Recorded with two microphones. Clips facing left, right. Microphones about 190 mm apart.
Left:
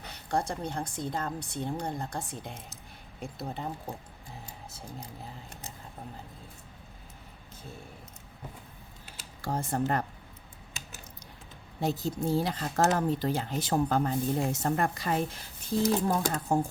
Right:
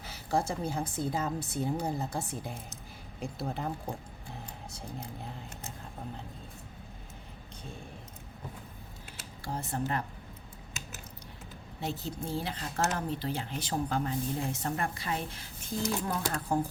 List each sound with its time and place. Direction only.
0.0 s speech: centre (ahead or behind)
4.9 s speech: centre (ahead or behind)
9.6 s speech: 45° left (ahead or behind)
11.8 s speech: 40° left (ahead or behind)